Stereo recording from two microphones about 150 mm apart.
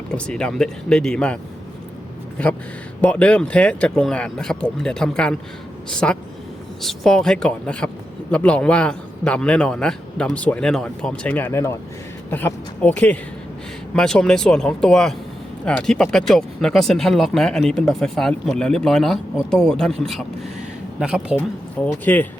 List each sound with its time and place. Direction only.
0.1 s speech: 5° left (ahead or behind)
2.4 s a man's voice: 5° left (ahead or behind)
21.8 s a man's voice: 10° left (ahead or behind)